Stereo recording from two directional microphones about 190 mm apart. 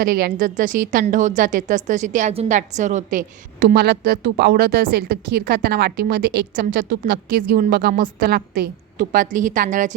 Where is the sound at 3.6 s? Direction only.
60° right (ahead or behind).